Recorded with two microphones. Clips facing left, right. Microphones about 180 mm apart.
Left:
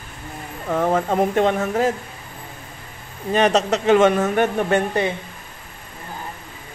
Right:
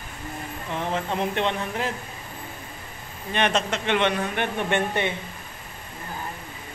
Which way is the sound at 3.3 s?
40° left (ahead or behind).